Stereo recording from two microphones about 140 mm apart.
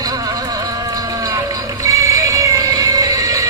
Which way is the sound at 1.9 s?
20° right (ahead or behind).